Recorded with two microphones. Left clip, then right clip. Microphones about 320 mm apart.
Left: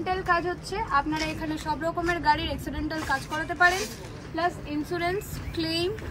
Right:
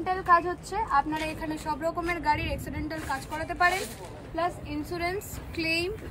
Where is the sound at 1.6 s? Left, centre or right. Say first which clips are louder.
Left 2 dB; centre.